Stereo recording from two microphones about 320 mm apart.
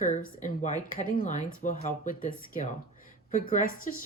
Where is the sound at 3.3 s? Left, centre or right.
Left.